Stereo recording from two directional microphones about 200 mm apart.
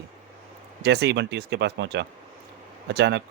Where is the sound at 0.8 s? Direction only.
55° right (ahead or behind).